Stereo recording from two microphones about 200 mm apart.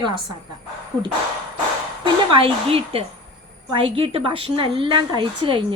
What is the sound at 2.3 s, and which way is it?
A woman's voice, 30° right (ahead or behind).